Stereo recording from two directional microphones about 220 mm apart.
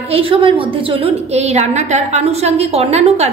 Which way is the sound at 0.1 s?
25° right (ahead or behind).